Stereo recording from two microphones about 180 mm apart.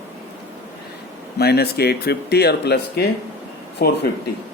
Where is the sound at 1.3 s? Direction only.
65° left (ahead or behind).